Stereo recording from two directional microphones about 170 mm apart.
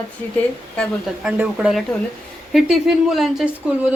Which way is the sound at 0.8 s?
5° right (ahead or behind).